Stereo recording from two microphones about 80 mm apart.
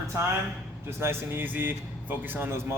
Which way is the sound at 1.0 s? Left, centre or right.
Right.